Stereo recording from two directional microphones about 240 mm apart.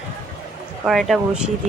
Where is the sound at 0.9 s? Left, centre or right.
Centre.